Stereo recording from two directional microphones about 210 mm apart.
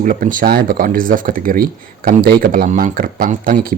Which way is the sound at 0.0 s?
40° right (ahead or behind).